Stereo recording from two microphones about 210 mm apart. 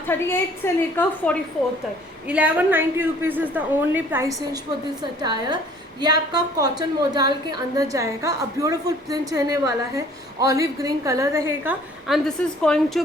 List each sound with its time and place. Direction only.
0.1 s a woman's voice: 10° left (ahead or behind)
2.2 s a woman's voice: 5° right (ahead or behind)